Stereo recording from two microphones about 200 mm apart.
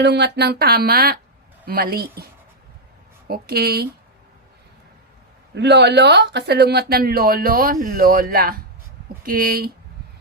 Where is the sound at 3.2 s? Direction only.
50° right (ahead or behind).